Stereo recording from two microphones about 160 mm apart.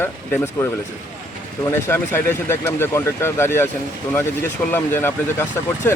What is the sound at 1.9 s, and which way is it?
Speech, 15° left (ahead or behind).